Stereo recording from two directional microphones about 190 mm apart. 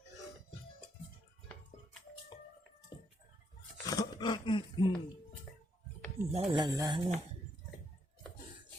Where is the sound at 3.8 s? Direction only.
20° left (ahead or behind).